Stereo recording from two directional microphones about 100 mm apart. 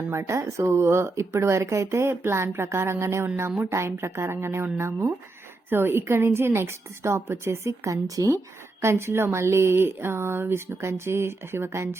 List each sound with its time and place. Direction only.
0.1 s speech: 30° right (ahead or behind)